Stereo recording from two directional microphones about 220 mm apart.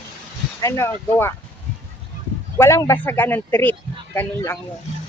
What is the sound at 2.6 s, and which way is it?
Speech, 15° left (ahead or behind).